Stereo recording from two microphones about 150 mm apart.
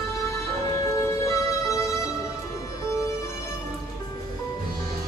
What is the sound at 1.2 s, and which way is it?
Music, 20° left (ahead or behind).